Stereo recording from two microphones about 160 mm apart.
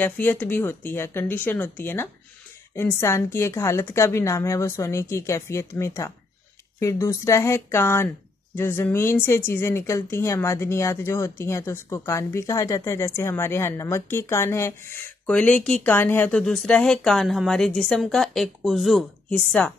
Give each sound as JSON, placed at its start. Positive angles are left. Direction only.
{"t": 0.0, "sound": "a woman's voice", "side_deg": 10}